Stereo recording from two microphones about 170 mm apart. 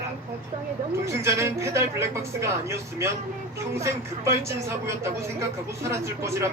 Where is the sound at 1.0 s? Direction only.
15° right (ahead or behind).